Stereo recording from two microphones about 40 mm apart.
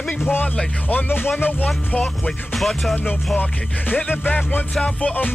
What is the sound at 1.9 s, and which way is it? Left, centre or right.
Speech, left.